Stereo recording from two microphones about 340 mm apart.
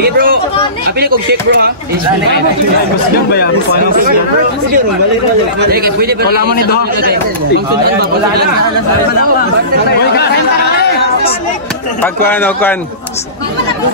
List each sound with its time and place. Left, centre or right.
0.9 s a man's voice: right
5.6 s a man's voice: right
6.5 s a man's voice: left
9.8 s speech: left
12.0 s speech: centre